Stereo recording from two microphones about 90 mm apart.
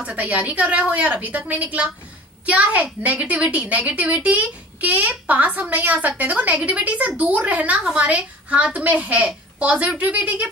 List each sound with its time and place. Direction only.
0.0 s a woman's voice: 15° right (ahead or behind)